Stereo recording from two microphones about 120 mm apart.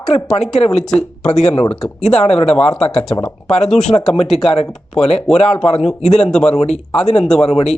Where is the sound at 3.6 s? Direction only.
5° left (ahead or behind).